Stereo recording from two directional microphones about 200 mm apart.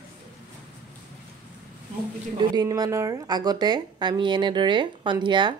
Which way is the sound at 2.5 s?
20° right (ahead or behind).